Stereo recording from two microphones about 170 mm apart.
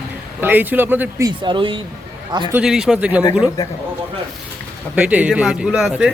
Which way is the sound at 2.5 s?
5° right (ahead or behind).